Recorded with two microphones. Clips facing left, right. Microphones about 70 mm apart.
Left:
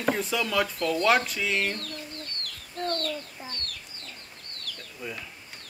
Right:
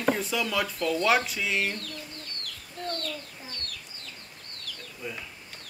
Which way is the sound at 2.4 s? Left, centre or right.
Left.